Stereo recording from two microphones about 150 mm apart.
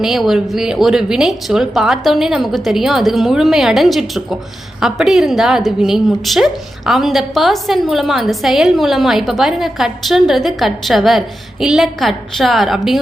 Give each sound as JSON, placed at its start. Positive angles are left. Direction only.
{"t": 0.0, "sound": "a woman's voice", "side_deg": 0}